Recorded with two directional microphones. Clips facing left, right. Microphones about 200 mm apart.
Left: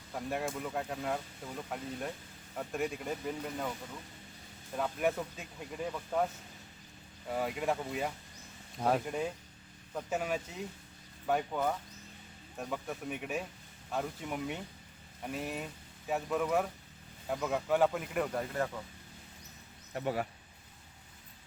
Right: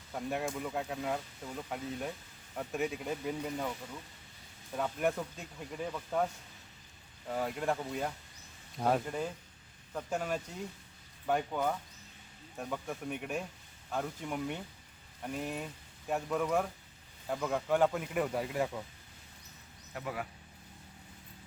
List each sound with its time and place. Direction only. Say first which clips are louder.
0.1 s speech: even; centre (ahead or behind)
4.7 s speech: even; centre (ahead or behind)
7.3 s speech: even; 5° left (ahead or behind)
19.9 s speech: left 5 dB; 30° left (ahead or behind)